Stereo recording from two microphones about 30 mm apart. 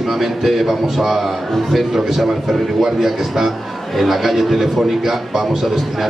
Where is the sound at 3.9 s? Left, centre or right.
Centre.